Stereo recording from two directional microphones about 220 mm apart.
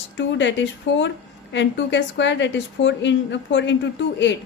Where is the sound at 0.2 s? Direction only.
55° left (ahead or behind).